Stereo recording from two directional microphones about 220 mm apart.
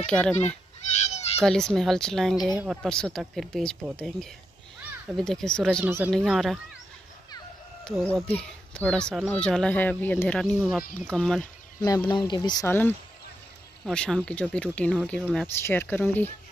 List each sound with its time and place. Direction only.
0.0 s a woman's voice: 5° left (ahead or behind)
0.9 s goat: 30° left (ahead or behind)
1.4 s a woman's voice: 5° left (ahead or behind)
5.9 s speech: 10° right (ahead or behind)
6.1 s a woman's voice: centre (ahead or behind)
7.8 s a woman's voice: centre (ahead or behind)
11.8 s a woman's voice: 20° left (ahead or behind)